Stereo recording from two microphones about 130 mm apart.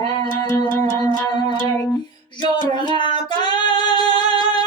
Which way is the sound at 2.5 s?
35° left (ahead or behind).